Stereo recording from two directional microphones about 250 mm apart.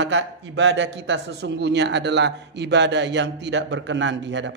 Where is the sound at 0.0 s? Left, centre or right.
Right.